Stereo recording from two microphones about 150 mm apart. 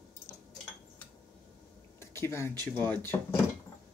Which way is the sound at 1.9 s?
15° left (ahead or behind).